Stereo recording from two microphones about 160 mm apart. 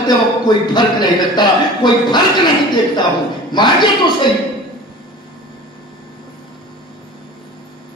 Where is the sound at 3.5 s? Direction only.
30° left (ahead or behind).